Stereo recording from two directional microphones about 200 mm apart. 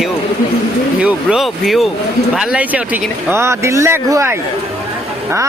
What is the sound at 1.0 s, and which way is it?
Speech, 5° right (ahead or behind).